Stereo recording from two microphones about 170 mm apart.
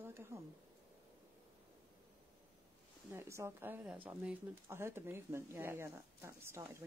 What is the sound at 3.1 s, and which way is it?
Speech, 15° right (ahead or behind).